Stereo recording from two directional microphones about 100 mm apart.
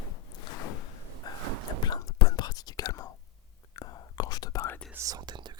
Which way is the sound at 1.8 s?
40° left (ahead or behind).